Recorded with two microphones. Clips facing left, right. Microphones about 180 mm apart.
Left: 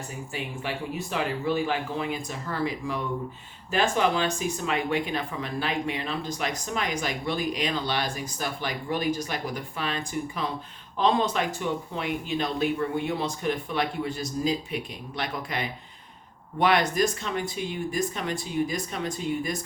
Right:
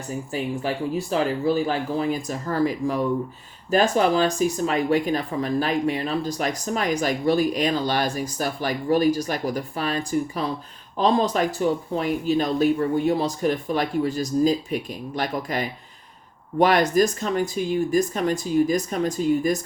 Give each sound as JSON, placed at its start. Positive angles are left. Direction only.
{"t": 0.3, "sound": "speech", "side_deg": -35}